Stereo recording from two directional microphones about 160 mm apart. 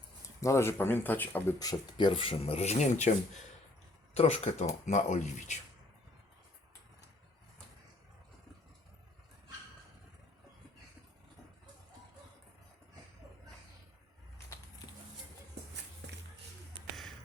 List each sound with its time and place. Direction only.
0.4 s speech: 15° left (ahead or behind)
1.5 s speech: 25° left (ahead or behind); by 5.5 s 50° left (ahead or behind)
16.0 s music: 90° right